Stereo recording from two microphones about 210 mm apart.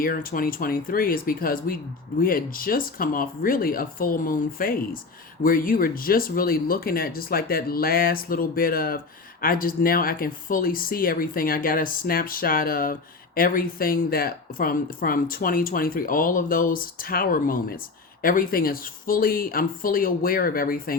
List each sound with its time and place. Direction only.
0.0 s speech: 45° left (ahead or behind)